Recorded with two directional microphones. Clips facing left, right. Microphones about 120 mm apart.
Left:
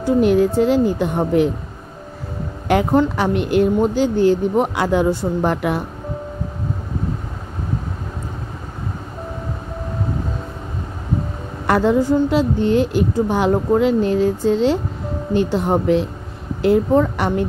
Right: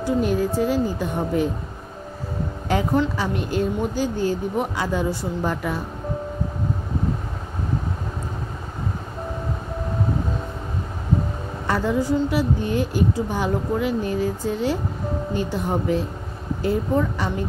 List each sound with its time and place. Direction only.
0.0 s a woman's voice: 65° left (ahead or behind)
2.7 s speech: 60° left (ahead or behind)
11.6 s a woman's voice: 70° left (ahead or behind)